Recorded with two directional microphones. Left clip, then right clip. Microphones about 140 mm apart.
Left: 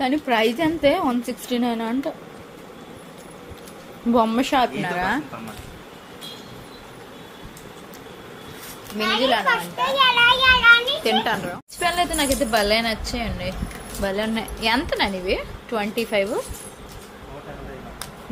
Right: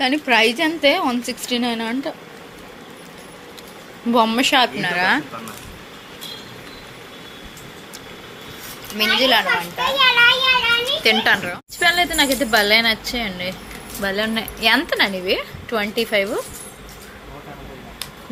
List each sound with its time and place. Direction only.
0.0 s a woman's voice: 20° left (ahead or behind)
4.1 s a woman's voice: 15° left (ahead or behind)
9.0 s a child's voice: 5° right (ahead or behind)
11.0 s speech: 10° left (ahead or behind)